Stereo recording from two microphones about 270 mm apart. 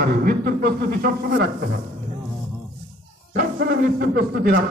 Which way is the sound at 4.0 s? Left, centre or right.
Right.